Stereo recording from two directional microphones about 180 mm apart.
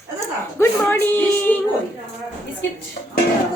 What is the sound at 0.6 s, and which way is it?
A woman's voice, 10° left (ahead or behind).